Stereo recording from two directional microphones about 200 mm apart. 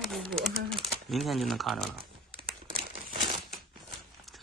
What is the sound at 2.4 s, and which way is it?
Crumpling, 25° right (ahead or behind).